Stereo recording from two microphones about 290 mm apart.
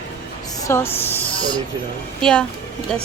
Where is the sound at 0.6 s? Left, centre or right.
Centre.